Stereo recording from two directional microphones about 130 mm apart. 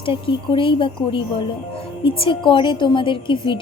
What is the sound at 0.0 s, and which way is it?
Speech, 40° left (ahead or behind).